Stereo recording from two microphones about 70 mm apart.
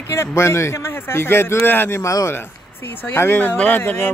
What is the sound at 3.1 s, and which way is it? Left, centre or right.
Speech, left.